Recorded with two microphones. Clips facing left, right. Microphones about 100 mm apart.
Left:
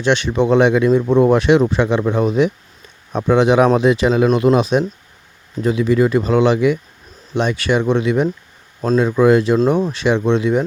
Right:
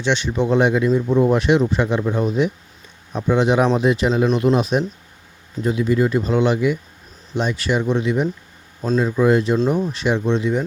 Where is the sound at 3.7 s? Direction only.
90° left.